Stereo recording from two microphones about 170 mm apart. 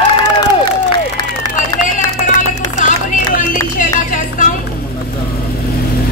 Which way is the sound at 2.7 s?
50° left (ahead or behind).